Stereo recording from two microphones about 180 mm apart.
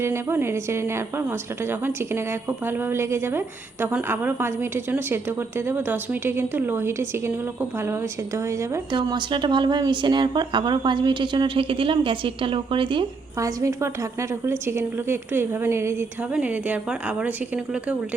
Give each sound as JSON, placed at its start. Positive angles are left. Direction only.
{"t": 0.0, "sound": "a woman's voice", "side_deg": -15}
{"t": 8.4, "sound": "speech", "side_deg": -20}
{"t": 13.6, "sound": "a woman's voice", "side_deg": -15}